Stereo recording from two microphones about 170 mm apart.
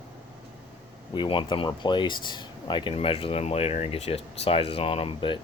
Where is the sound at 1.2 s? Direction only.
30° left (ahead or behind).